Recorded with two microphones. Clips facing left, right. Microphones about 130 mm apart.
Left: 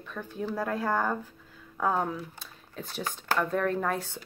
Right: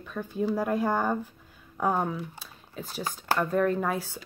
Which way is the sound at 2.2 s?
5° right (ahead or behind).